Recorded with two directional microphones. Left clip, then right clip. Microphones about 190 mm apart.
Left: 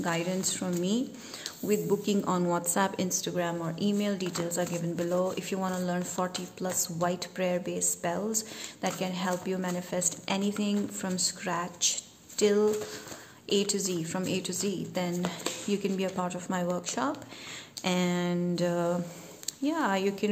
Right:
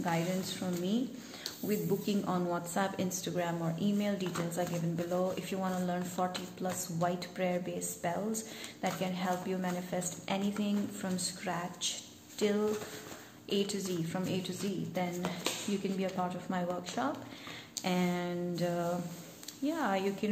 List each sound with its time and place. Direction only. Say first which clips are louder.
0.0 s a woman's voice: left 4 dB; 40° left (ahead or behind)